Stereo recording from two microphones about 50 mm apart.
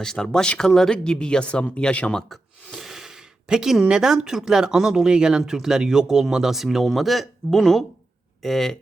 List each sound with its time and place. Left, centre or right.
0.0 s speech: centre
2.7 s a sound: centre
3.8 s speech: centre